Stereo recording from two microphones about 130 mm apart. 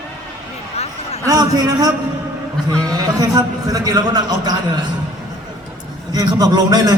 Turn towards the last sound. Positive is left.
turn(degrees=-30)  # may be behind; listen again after turning